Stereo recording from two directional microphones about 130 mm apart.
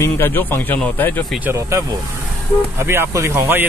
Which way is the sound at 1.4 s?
20° right (ahead or behind).